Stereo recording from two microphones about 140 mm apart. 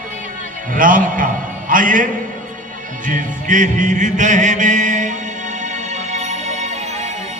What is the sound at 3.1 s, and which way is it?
Music, 65° right (ahead or behind).